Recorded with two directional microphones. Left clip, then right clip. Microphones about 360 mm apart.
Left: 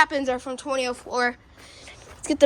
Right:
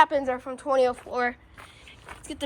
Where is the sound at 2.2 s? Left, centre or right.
Centre.